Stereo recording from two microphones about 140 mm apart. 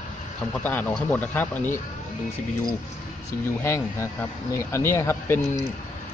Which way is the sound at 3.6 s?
20° left (ahead or behind).